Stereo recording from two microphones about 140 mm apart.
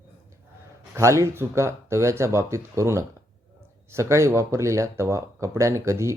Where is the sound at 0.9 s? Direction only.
20° right (ahead or behind).